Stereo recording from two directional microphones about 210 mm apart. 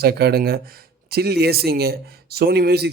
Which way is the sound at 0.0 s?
50° right (ahead or behind).